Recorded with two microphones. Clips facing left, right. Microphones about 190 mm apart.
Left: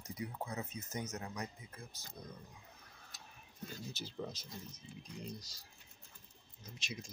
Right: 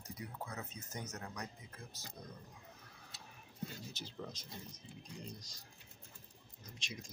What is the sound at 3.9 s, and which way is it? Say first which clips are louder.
Speech: left 3 dB; 5° left (ahead or behind).